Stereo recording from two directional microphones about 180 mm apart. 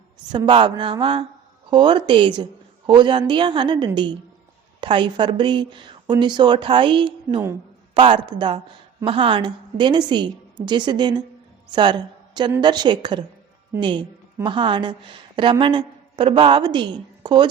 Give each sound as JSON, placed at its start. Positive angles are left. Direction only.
{"t": 0.3, "sound": "a woman's voice", "side_deg": -25}